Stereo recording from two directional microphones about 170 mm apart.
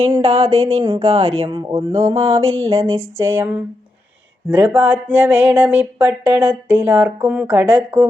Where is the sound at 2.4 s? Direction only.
15° right (ahead or behind).